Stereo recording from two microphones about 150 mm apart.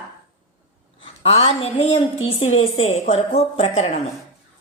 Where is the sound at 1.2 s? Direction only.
40° left (ahead or behind).